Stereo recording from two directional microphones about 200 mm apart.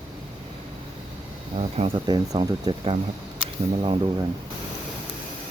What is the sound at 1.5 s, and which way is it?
Speech, 30° right (ahead or behind).